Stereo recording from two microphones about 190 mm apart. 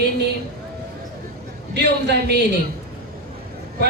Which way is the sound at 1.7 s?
60° right (ahead or behind).